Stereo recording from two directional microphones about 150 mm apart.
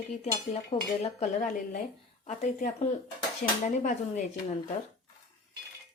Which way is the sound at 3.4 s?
65° left (ahead or behind).